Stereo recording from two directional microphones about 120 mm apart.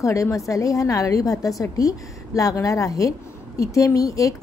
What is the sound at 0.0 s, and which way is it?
Speech, 25° left (ahead or behind).